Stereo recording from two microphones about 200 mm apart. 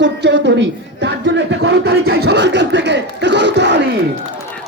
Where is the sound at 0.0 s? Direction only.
60° right (ahead or behind).